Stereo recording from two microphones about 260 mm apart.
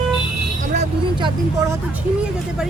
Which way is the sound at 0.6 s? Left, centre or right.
Right.